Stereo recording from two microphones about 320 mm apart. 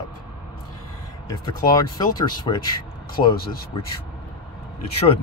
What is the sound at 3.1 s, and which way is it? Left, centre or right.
Speech, left.